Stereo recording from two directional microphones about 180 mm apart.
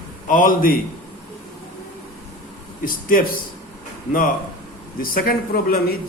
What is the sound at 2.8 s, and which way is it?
Speech, 50° left (ahead or behind).